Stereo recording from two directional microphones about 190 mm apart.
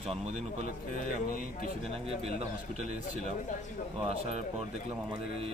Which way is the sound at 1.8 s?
30° right (ahead or behind).